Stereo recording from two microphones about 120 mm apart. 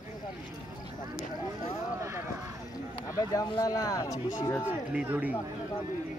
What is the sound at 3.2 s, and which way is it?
Speech, 30° left (ahead or behind).